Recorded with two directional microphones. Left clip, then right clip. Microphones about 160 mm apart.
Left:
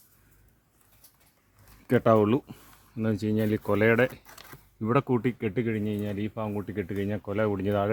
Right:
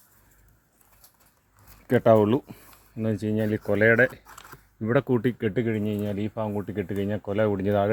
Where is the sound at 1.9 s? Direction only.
Centre (ahead or behind).